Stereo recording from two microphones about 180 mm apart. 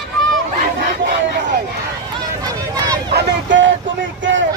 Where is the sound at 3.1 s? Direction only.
90° right.